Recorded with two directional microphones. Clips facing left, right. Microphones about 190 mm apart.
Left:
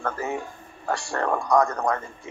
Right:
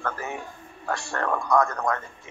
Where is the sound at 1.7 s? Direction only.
15° left (ahead or behind).